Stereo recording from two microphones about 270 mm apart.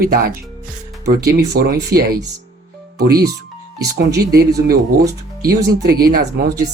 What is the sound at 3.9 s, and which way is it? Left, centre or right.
Speech, right.